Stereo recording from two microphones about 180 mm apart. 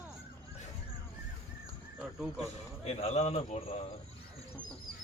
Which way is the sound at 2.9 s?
35° left (ahead or behind).